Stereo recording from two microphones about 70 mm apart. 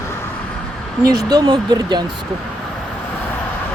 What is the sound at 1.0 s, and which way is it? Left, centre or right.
Speech, right.